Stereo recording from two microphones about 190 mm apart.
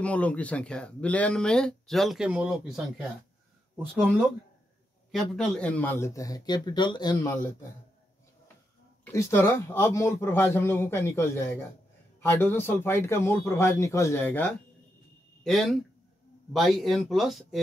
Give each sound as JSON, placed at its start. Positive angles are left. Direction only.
{"t": 0.0, "sound": "a man's voice", "side_deg": 5}
{"t": 9.0, "sound": "a man's voice", "side_deg": 15}